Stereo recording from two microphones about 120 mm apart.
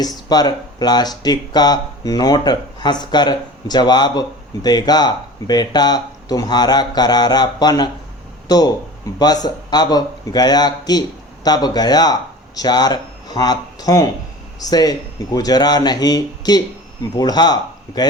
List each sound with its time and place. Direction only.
0.0 s speech: 35° left (ahead or behind)